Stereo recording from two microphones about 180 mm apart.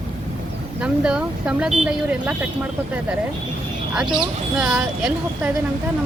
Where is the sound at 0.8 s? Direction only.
5° right (ahead or behind).